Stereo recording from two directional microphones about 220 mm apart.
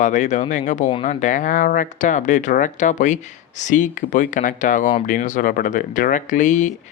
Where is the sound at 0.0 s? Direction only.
35° left (ahead or behind).